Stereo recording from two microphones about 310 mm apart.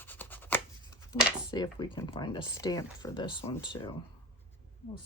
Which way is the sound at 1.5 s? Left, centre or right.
Centre.